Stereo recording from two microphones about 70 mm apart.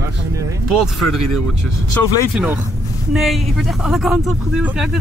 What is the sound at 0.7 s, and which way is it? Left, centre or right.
Speech, centre.